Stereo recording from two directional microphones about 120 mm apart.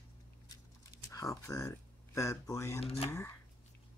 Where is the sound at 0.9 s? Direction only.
30° left (ahead or behind).